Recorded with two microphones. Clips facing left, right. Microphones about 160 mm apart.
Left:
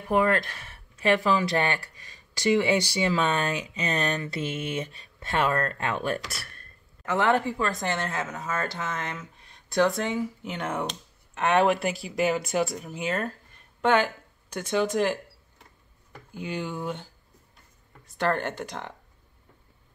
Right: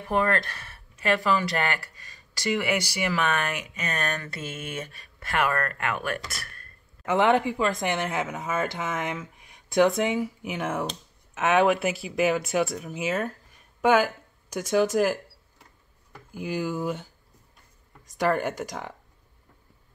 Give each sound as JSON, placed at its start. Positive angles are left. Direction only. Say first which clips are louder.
{"t": 0.1, "sound": "speech", "louder": "left 2 dB", "side_deg": 15}
{"t": 7.1, "sound": "speech", "louder": "right 2 dB", "side_deg": -20}
{"t": 16.3, "sound": "speech", "louder": "right 3 dB", "side_deg": -5}